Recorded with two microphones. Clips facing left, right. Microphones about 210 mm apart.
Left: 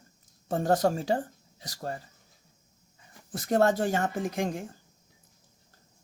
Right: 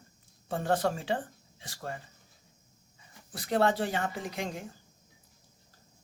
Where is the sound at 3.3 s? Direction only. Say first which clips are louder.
Left 3 dB; 45° left (ahead or behind).